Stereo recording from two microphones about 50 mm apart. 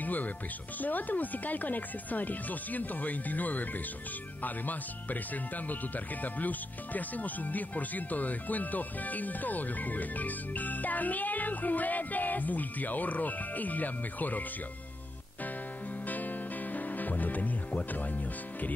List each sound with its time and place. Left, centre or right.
0.0 s speech: left
16.1 s music: left